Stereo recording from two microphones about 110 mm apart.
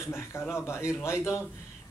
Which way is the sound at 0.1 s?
25° left (ahead or behind).